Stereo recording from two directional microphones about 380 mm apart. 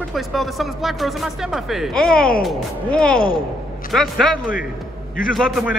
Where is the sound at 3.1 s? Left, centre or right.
Left.